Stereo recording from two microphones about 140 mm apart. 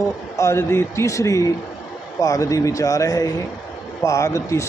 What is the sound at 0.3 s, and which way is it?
A man's voice, 20° left (ahead or behind).